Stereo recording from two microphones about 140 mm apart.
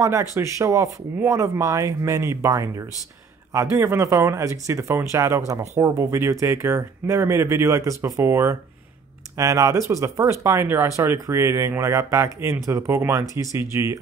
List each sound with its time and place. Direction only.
0.0 s speech: 20° right (ahead or behind)